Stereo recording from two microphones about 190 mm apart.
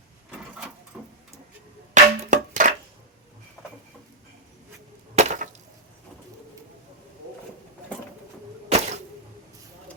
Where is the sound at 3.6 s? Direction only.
15° left (ahead or behind).